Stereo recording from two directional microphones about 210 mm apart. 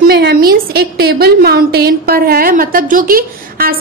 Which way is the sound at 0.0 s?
50° right (ahead or behind).